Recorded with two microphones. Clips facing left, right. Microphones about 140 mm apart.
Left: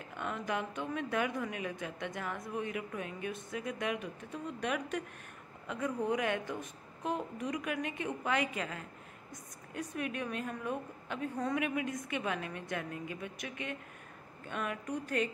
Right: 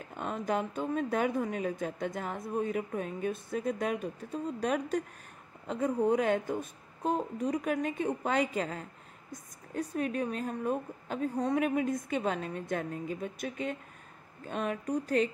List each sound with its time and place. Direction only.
0.2 s a woman's voice: 35° right (ahead or behind)
14.5 s a woman's voice: 35° right (ahead or behind)